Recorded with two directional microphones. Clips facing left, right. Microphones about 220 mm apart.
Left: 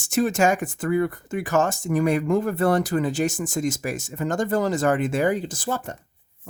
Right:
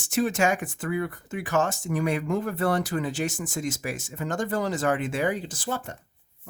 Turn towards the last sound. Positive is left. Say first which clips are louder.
# left 4 dB
turn(degrees=45)  # may be behind; listen again after turning